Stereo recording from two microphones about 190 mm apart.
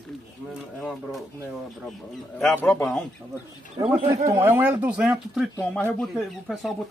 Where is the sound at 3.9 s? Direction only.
30° right (ahead or behind).